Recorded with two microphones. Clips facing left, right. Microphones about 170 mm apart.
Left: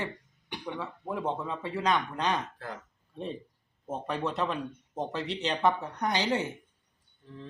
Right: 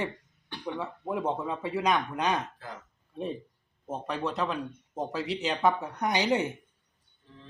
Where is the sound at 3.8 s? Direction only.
5° left (ahead or behind); by 6.5 s 15° right (ahead or behind).